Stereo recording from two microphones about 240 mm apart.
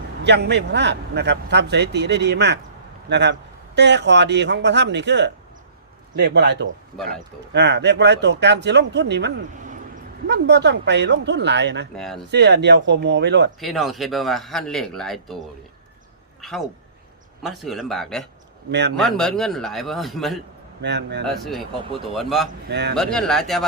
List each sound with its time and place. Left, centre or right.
0.2 s a man's voice: right
11.9 s speech: centre
12.3 s a man's voice: right
13.6 s speech: centre
16.4 s speech: centre
18.7 s a man's voice: right
18.9 s speech: centre
20.8 s a man's voice: right
21.2 s speech: centre
22.7 s a man's voice: right
23.0 s speech: centre